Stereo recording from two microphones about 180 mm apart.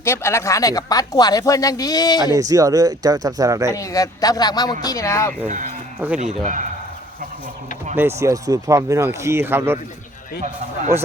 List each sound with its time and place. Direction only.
0.0 s speech: 15° left (ahead or behind)
2.2 s speech: 20° right (ahead or behind)
3.8 s speech: 20° left (ahead or behind)
5.5 s speech: 45° right (ahead or behind)
7.9 s speech: 15° right (ahead or behind)
10.9 s speech: 15° right (ahead or behind)